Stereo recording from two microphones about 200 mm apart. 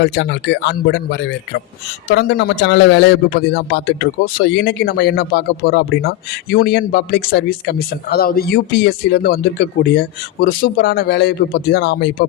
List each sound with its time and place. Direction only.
0.0 s a man's voice: 60° left (ahead or behind)